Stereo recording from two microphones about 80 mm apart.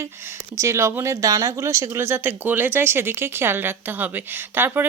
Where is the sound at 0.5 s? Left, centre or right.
Right.